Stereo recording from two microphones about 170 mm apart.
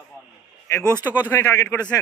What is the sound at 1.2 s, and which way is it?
Speech, 10° left (ahead or behind).